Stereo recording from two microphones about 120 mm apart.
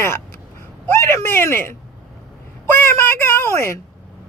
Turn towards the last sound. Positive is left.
turn(degrees=20)  # may be behind; listen again after turning